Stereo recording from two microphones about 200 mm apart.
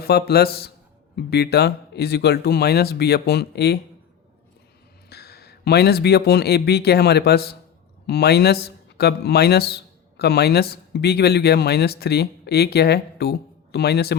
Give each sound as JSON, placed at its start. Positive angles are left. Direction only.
{"t": 0.0, "sound": "speech", "side_deg": 50}
{"t": 5.0, "sound": "speech", "side_deg": 55}